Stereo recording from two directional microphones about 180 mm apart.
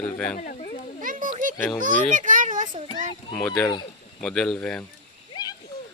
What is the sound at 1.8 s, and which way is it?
A child's voice, 45° right (ahead or behind).